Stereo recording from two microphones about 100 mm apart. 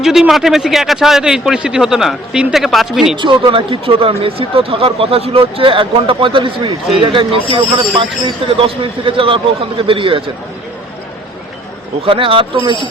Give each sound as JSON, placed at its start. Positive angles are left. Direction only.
{"t": 0.0, "sound": "speech", "side_deg": -5}
{"t": 3.2, "sound": "speech", "side_deg": -55}
{"t": 8.4, "sound": "speech", "side_deg": -65}
{"t": 12.0, "sound": "speech", "side_deg": -60}